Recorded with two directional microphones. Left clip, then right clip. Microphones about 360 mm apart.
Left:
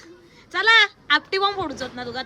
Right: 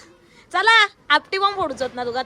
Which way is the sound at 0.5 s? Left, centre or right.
Centre.